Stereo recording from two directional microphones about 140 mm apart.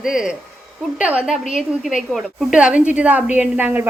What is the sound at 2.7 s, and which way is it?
Speech, 60° left (ahead or behind).